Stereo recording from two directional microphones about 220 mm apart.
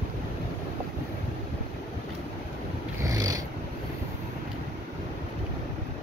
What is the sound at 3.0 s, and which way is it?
Filing, 15° right (ahead or behind).